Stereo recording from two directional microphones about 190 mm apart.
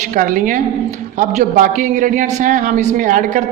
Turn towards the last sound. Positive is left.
turn(degrees=-45)  # may be behind; listen again after turning